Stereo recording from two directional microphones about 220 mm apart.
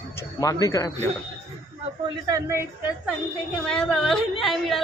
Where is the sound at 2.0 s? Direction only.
15° right (ahead or behind).